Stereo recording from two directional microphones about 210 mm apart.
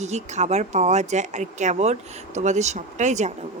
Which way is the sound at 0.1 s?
30° right (ahead or behind).